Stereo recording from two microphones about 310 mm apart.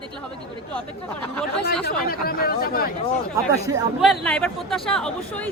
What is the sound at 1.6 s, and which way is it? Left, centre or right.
Speech, left.